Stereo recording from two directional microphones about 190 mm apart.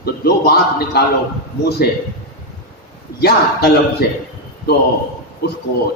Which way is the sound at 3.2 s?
55° left (ahead or behind).